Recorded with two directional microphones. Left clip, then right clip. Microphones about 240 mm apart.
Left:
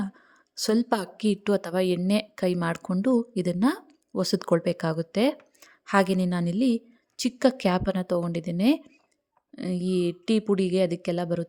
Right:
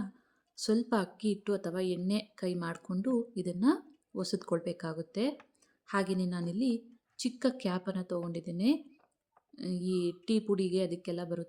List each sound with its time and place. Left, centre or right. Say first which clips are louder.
0.5 s a woman's voice: left 6 dB; left